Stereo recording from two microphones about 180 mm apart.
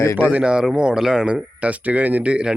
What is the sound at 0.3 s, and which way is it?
Speech, 5° right (ahead or behind).